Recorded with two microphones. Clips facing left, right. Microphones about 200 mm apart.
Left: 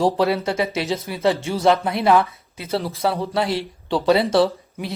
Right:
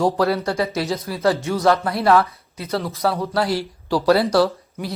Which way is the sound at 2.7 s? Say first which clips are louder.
Even; 30° left (ahead or behind).